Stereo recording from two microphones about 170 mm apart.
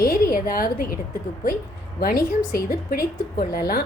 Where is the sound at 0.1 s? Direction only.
55° left (ahead or behind).